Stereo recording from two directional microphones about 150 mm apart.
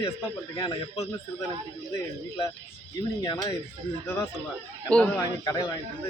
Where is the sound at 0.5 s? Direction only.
25° left (ahead or behind).